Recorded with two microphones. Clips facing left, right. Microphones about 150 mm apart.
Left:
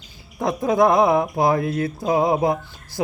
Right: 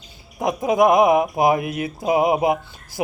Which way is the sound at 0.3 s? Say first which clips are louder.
Even; 20° right (ahead or behind).